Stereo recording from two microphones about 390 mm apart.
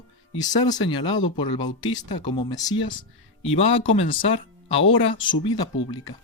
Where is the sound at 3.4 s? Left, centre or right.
Left.